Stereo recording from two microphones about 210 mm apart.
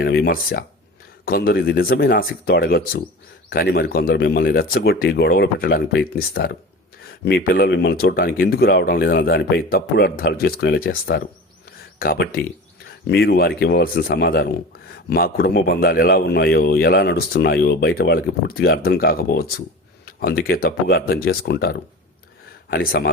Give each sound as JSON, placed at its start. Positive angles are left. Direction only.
{"t": 0.0, "sound": "a man's voice", "side_deg": 50}